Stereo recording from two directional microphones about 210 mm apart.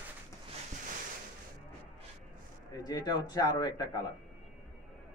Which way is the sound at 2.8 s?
20° left (ahead or behind).